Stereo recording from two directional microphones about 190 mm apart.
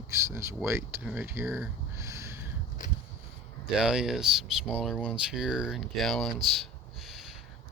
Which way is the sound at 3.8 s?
5° right (ahead or behind).